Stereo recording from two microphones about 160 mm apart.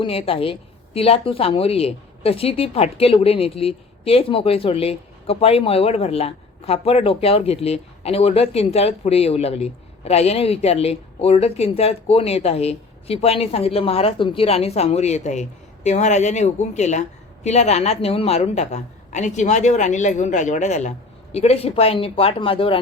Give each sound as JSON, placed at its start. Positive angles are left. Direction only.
{"t": 0.0, "sound": "a woman's voice", "side_deg": 35}